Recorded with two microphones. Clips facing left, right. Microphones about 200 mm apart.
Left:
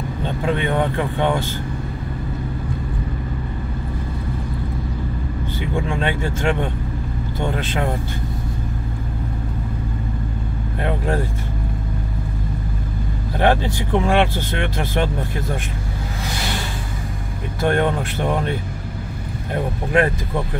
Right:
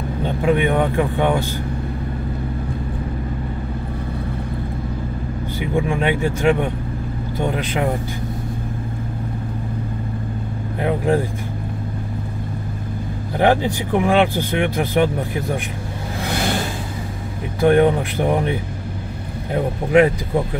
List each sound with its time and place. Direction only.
0.2 s speech: 15° right (ahead or behind)
5.6 s speech: 15° right (ahead or behind)
10.8 s speech: 15° right (ahead or behind)
13.4 s speech: 15° right (ahead or behind)
17.6 s speech: 15° right (ahead or behind)